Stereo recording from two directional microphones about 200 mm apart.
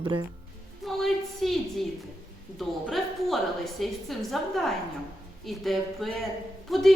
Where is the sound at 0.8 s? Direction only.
Centre (ahead or behind).